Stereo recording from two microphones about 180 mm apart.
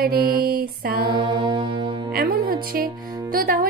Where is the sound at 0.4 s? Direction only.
55° right (ahead or behind).